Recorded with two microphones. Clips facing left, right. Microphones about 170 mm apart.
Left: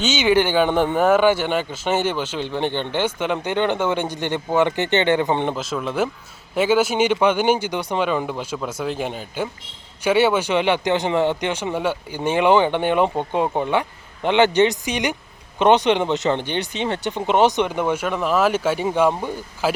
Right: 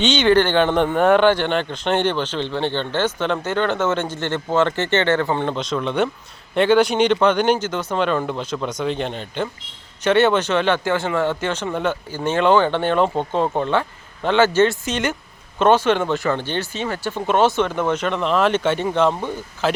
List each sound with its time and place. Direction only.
0.0 s speech: 5° left (ahead or behind)
5.5 s speech: 5° left (ahead or behind)